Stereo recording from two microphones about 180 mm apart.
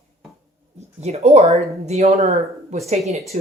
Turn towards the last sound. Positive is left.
turn(degrees=-35)  # may be behind; listen again after turning